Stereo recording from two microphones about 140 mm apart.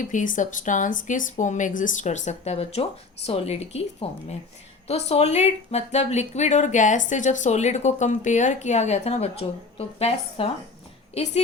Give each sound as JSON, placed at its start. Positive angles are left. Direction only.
{"t": 0.1, "sound": "speech", "side_deg": 65}